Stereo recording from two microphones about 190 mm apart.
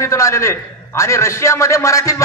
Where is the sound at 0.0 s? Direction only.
15° left (ahead or behind).